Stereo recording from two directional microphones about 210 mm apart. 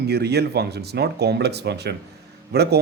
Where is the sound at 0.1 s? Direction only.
50° right (ahead or behind).